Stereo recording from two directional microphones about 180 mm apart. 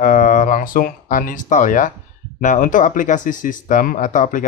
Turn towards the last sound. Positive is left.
turn(degrees=45)  # may be behind; listen again after turning